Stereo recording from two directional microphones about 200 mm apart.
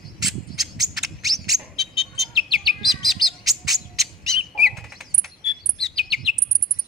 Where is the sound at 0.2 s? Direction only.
Centre (ahead or behind).